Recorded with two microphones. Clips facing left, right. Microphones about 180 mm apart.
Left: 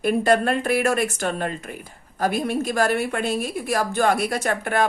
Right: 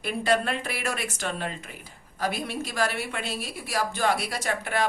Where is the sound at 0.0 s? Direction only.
50° left (ahead or behind).